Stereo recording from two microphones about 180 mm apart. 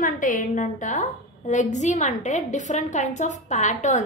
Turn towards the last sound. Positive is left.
turn(degrees=40)  # may be behind; listen again after turning